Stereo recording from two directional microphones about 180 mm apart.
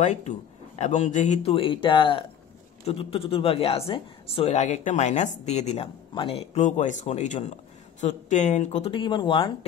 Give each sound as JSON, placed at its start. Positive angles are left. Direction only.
{"t": 0.0, "sound": "speech", "side_deg": 40}